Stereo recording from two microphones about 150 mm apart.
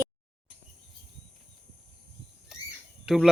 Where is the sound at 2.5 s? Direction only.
5° right (ahead or behind).